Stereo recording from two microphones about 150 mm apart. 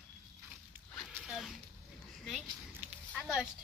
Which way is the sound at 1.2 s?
Centre (ahead or behind).